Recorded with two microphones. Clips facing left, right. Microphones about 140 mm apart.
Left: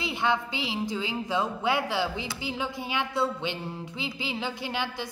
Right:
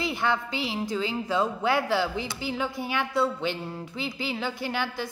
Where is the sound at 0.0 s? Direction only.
20° left (ahead or behind).